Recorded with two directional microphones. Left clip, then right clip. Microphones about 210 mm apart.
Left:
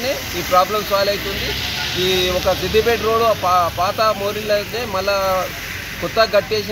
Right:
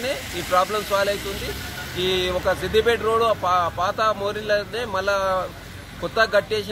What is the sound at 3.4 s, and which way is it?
Speech, 20° right (ahead or behind).